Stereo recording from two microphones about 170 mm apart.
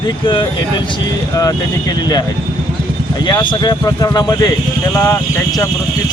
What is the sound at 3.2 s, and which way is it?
Speech, 25° left (ahead or behind).